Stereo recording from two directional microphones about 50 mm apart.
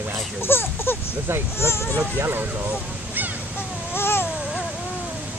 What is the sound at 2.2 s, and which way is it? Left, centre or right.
Speech, right.